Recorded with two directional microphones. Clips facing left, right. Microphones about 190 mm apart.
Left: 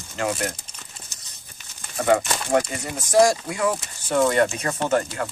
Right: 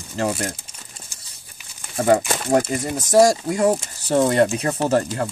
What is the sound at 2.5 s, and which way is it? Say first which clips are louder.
Speech: right 3 dB; 40° right (ahead or behind).